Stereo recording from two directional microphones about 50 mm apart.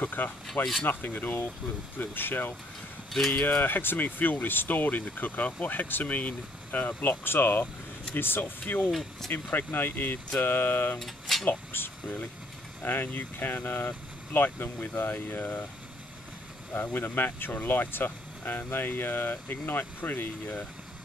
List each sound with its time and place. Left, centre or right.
0.0 s speech: left
11.0 s speech: centre
11.4 s speech: left
16.7 s speech: left